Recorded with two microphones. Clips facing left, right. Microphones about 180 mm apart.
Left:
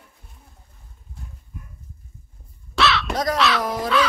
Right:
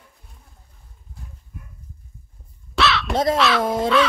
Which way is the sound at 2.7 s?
Centre (ahead or behind).